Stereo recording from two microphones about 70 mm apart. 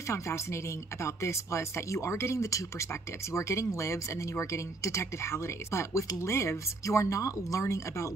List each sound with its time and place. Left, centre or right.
0.1 s speech: left